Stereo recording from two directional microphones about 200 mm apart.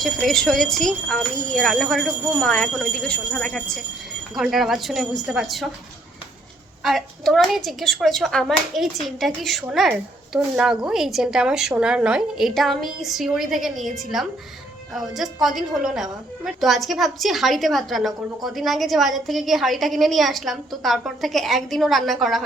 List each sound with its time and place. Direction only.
0.0 s a woman's voice: centre (ahead or behind)
6.8 s a woman's voice: centre (ahead or behind)